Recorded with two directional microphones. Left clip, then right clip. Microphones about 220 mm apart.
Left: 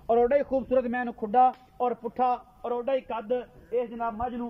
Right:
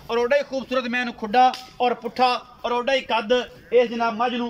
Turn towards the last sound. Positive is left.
turn(degrees=0)  # may be behind; listen again after turning